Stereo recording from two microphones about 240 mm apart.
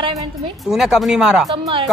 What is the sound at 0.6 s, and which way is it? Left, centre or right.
Speech, centre.